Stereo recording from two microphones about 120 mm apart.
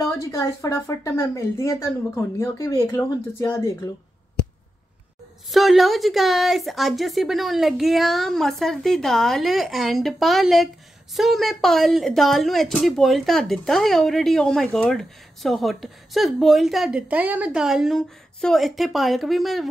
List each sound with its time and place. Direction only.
0.0 s speech: 25° left (ahead or behind)
5.5 s speech: centre (ahead or behind)